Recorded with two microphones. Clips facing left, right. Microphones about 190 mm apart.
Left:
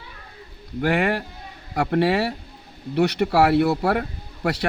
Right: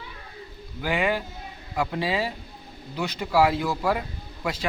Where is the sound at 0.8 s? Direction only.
65° left (ahead or behind).